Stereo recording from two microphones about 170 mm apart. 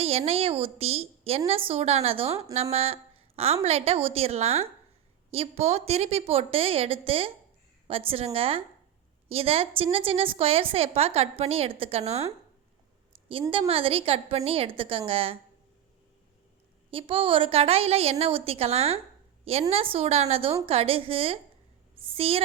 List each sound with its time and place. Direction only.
0.0 s a woman's voice: 35° right (ahead or behind)
13.5 s a woman's voice: 35° right (ahead or behind)
16.9 s a woman's voice: 30° right (ahead or behind)